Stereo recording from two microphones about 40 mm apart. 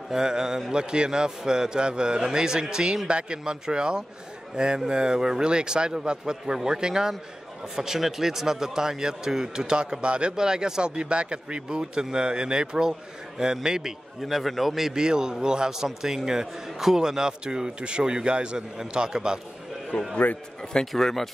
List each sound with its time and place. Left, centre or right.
0.1 s a man's voice: centre
14.2 s a man's voice: centre
14.8 s a man's voice: centre
15.0 s a man's voice: centre
19.9 s speech: left
20.8 s a man's voice: centre